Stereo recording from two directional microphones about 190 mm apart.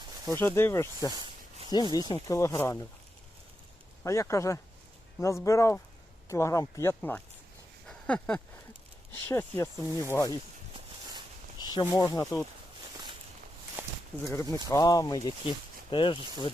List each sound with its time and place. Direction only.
0.3 s speech: 10° left (ahead or behind)
4.0 s speech: 15° left (ahead or behind)
7.9 s a sound: 5° left (ahead or behind)
9.3 s speech: 15° left (ahead or behind)
11.6 s speech: 20° left (ahead or behind)
13.8 s a sound: 10° right (ahead or behind)
14.5 s speech: 15° left (ahead or behind)